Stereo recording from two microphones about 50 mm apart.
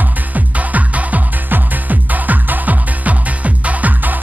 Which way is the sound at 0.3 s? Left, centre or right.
Right.